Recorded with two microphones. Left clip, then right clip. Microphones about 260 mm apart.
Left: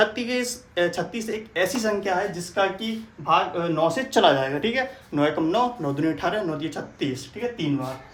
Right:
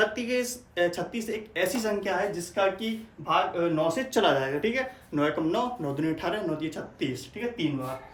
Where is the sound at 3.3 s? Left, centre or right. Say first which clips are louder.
Left 4 dB; centre.